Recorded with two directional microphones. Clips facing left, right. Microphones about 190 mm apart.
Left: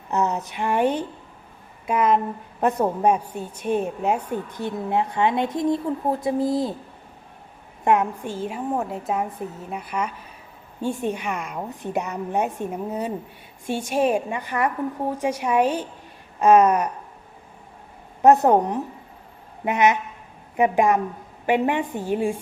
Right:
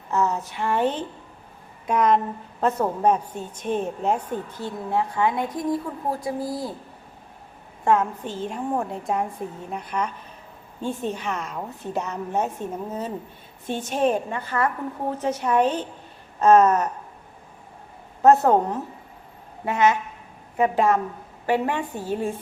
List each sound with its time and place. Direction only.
0.1 s a woman's voice: 20° left (ahead or behind)
7.9 s a woman's voice: 15° left (ahead or behind)
18.2 s a woman's voice: 15° left (ahead or behind)